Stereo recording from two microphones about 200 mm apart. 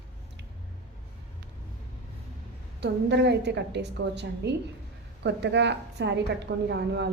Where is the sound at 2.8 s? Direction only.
60° right (ahead or behind).